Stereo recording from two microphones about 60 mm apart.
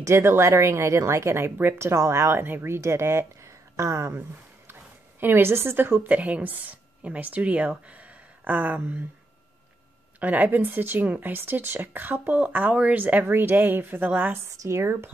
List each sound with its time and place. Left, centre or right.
0.0 s speech: right
5.2 s a woman's voice: right
6.0 s speech: right
7.9 s a sound: right
10.2 s speech: right
14.7 s speech: right